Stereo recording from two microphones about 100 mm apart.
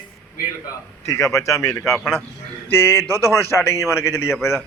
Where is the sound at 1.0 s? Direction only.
35° left (ahead or behind).